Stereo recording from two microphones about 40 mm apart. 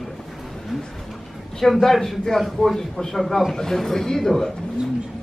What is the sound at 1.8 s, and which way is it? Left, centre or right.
A man's voice, centre.